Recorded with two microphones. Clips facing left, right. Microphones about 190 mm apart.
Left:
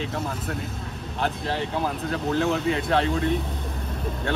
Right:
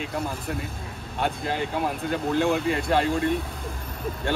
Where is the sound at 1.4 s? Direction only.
5° right (ahead or behind).